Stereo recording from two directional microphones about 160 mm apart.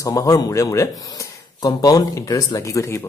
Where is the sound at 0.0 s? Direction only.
20° left (ahead or behind).